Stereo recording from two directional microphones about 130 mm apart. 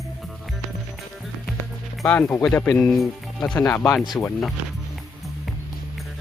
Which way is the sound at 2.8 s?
Centre (ahead or behind).